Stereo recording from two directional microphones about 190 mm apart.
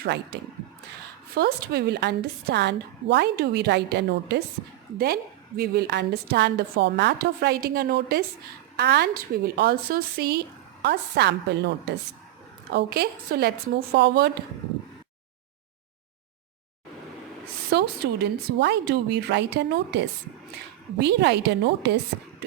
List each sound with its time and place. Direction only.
0.0 s a woman's voice: 60° right (ahead or behind)
1.4 s a woman's voice: 55° right (ahead or behind)
17.7 s a woman's voice: 60° right (ahead or behind)